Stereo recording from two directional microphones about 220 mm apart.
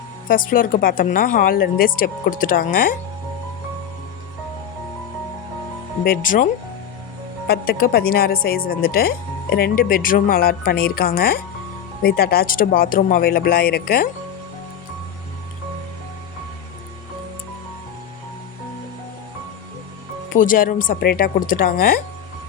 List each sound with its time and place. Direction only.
0.3 s a woman's voice: 40° left (ahead or behind)
6.1 s a woman's voice: 35° left (ahead or behind)
20.3 s a woman's voice: 40° left (ahead or behind)